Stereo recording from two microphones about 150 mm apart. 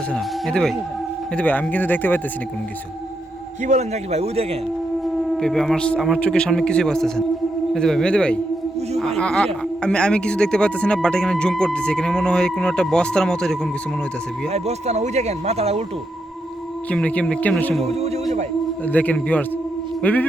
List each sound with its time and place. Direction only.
0.1 s speech: 5° left (ahead or behind)
3.6 s speech: 50° right (ahead or behind)
5.4 s speech: 5° left (ahead or behind)
14.5 s speech: 45° right (ahead or behind)
16.9 s speech: 10° left (ahead or behind)
17.8 s music: 45° right (ahead or behind)
18.9 s speech: 10° left (ahead or behind)